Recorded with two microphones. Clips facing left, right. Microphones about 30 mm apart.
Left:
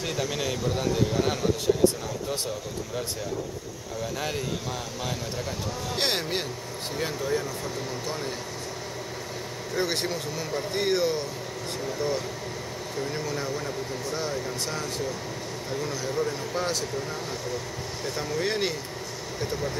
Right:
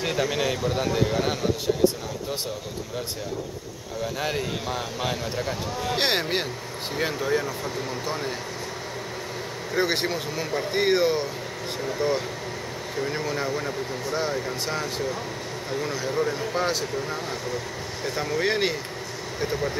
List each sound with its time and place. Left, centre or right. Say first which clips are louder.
0.0 s speech: right 4 dB; centre
4.0 s speech: right 3 dB; centre
9.8 s speech: right 4 dB; centre
18.0 s speech: right 4 dB; centre